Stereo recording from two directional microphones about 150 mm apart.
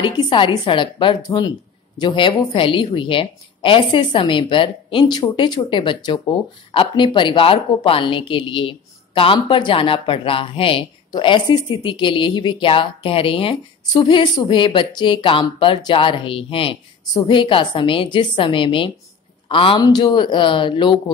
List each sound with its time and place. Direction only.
0.0 s a woman's voice: 30° left (ahead or behind)